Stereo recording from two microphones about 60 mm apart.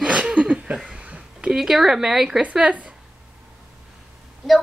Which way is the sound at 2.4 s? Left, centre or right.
Centre.